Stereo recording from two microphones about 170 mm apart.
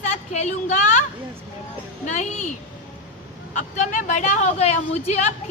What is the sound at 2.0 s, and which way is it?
Speech, 45° left (ahead or behind).